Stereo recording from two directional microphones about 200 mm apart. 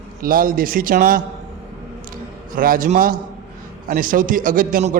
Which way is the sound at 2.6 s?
45° right (ahead or behind).